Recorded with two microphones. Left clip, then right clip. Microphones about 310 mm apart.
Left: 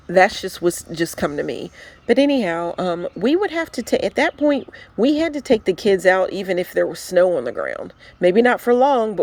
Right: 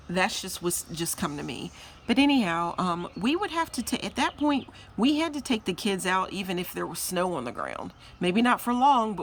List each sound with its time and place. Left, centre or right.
0.1 s speech: centre